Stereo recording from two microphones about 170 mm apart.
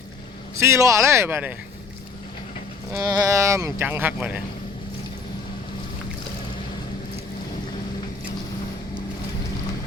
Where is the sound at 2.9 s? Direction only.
20° right (ahead or behind).